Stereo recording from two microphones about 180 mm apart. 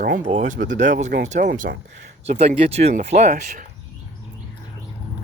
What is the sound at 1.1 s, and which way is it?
Speech, 60° right (ahead or behind).